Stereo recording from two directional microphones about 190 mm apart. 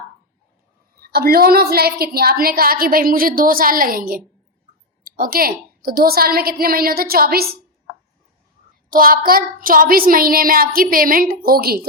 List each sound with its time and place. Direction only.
1.0 s a woman's voice: 55° right (ahead or behind)
8.9 s a woman's voice: 50° right (ahead or behind)